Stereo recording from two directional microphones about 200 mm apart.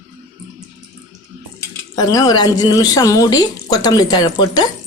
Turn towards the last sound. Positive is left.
turn(degrees=20)  # may be behind; listen again after turning